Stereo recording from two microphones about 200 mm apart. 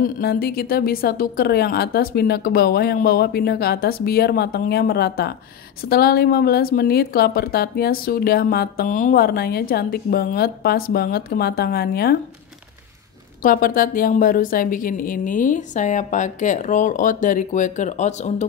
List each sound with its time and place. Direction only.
0.0 s a woman's voice: 50° left (ahead or behind)
13.4 s a woman's voice: 45° left (ahead or behind)